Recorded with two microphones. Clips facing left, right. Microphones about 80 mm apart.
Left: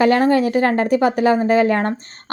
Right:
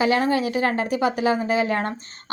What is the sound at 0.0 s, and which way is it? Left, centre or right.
A woman's voice, left.